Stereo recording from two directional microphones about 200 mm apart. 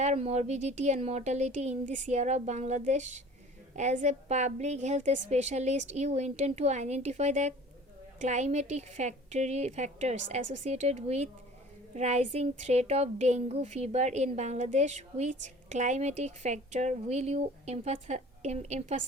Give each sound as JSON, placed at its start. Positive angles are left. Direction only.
{"t": 0.0, "sound": "a woman's voice", "side_deg": -35}